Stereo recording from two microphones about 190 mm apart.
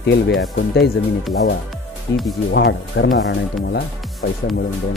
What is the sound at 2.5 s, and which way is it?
Speech, 65° left (ahead or behind).